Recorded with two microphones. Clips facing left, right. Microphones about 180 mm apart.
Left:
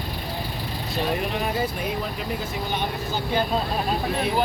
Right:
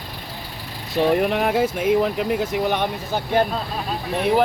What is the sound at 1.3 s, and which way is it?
Speech, 65° right (ahead or behind).